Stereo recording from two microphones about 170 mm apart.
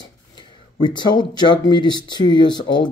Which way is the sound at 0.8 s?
25° left (ahead or behind).